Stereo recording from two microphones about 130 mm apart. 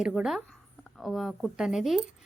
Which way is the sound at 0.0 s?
5° right (ahead or behind).